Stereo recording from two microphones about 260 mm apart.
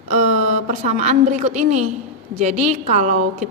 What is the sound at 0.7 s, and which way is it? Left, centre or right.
A woman's voice, right.